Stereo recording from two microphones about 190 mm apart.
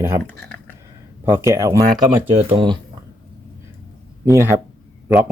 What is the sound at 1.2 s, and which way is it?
Speech, 15° right (ahead or behind).